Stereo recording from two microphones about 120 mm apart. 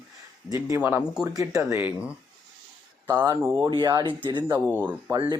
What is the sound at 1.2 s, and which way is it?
Speech, 30° right (ahead or behind).